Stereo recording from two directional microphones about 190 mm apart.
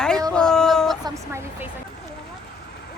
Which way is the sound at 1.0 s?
15° right (ahead or behind).